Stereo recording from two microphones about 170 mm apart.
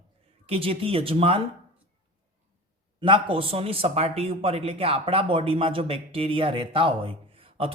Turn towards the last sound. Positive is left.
turn(degrees=-35)  # may be behind; listen again after turning